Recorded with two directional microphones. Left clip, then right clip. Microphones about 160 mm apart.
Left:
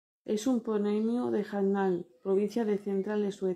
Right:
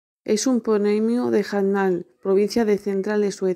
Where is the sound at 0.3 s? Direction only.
30° right (ahead or behind).